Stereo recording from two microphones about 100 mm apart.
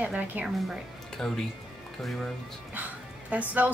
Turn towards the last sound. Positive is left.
turn(degrees=-15)  # may be behind; listen again after turning